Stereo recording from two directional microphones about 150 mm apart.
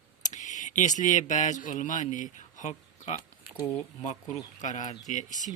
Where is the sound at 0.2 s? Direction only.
55° left (ahead or behind).